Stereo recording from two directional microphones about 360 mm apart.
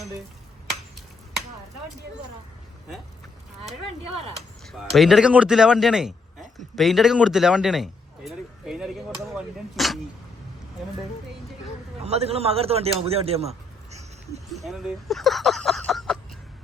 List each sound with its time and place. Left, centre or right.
4.6 s a man's voice: centre
12.0 s speech: centre
14.5 s speech: centre